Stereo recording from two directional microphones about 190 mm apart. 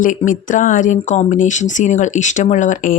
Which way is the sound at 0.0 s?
45° left (ahead or behind).